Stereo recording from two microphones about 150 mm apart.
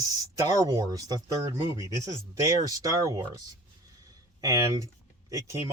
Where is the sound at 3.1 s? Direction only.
25° right (ahead or behind).